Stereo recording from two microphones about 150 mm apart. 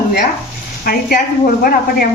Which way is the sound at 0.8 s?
70° left (ahead or behind).